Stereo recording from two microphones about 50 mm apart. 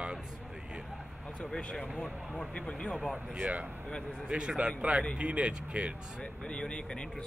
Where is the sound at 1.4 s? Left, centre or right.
Centre.